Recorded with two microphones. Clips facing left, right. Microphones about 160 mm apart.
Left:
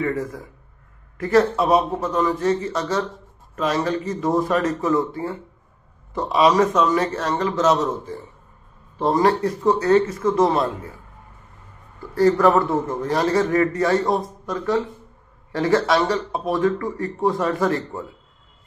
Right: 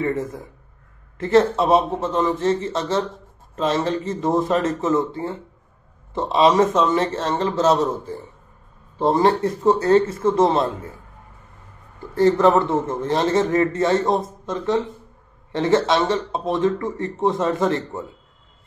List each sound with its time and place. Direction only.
0.0 s speech: 25° right (ahead or behind)
12.1 s speech: 25° right (ahead or behind)